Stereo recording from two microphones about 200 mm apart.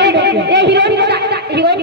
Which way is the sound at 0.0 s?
55° right (ahead or behind).